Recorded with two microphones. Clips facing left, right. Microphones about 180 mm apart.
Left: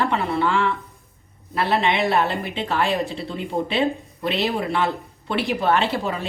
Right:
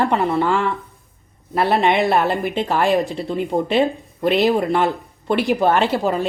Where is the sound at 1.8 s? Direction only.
50° right (ahead or behind).